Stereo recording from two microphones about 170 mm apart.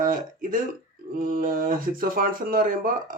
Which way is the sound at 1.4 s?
55° right (ahead or behind).